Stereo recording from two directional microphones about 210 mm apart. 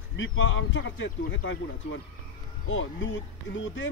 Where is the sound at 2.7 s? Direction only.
65° left (ahead or behind).